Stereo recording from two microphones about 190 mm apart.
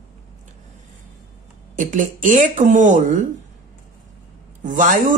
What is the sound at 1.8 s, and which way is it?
Speech, 45° right (ahead or behind).